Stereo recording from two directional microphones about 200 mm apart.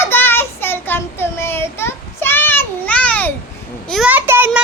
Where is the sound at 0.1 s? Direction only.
10° left (ahead or behind).